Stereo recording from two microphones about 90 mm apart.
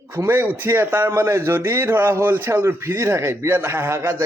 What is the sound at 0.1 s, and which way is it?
Speech, 25° right (ahead or behind).